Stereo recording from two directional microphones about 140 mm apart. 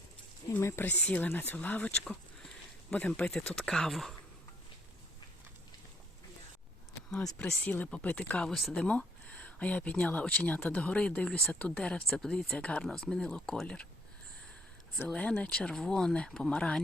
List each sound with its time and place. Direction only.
0.5 s speech: 15° left (ahead or behind)
7.3 s speech: 10° left (ahead or behind)
14.9 s speech: 10° left (ahead or behind)